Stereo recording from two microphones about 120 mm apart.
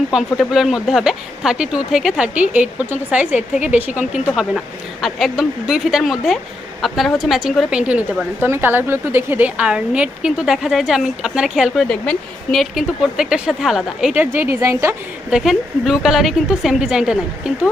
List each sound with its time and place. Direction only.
0.1 s speech: 5° right (ahead or behind); by 14.9 s 25° right (ahead or behind)
15.3 s speech: centre (ahead or behind)